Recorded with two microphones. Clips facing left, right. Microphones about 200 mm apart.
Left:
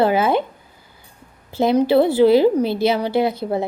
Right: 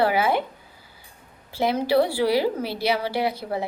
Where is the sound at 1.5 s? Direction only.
20° left (ahead or behind).